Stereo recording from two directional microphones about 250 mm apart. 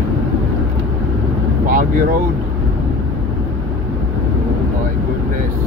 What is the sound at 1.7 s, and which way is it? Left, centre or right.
Speech, right.